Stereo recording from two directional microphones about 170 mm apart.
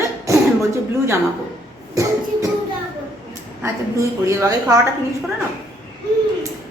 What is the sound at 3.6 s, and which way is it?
A woman's voice, 15° right (ahead or behind).